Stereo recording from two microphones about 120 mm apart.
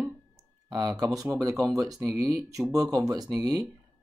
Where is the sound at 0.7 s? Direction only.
35° right (ahead or behind).